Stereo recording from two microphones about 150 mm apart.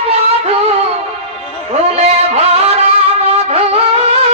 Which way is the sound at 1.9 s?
45° right (ahead or behind).